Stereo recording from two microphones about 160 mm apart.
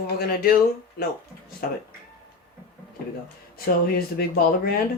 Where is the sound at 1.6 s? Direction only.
75° left (ahead or behind).